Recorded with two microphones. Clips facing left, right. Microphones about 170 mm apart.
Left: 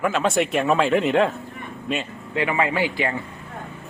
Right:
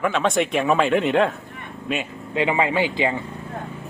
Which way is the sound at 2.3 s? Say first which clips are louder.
Right 2 dB; 20° right (ahead or behind).